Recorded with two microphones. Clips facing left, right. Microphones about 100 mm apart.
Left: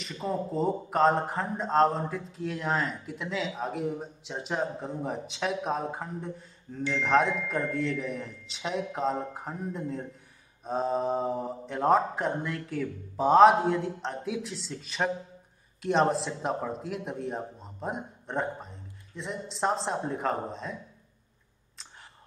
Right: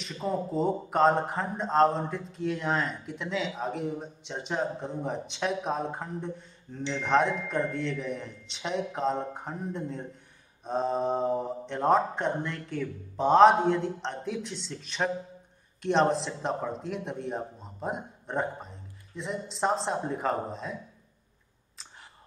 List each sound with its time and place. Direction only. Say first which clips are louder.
0.0 s speech: right 1 dB; centre (ahead or behind)